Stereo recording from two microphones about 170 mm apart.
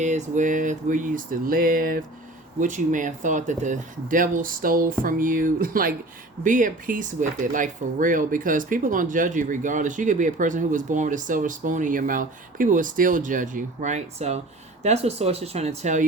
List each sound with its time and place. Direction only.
0.0 s speech: 45° right (ahead or behind)